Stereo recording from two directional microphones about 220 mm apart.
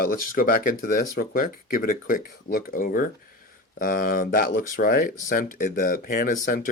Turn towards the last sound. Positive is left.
turn(degrees=40)  # may be behind; listen again after turning